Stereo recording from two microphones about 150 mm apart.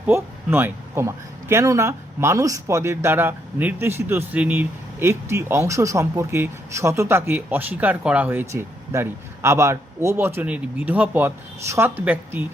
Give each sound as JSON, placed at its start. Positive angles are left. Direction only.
{"t": 0.0, "sound": "speech", "side_deg": -15}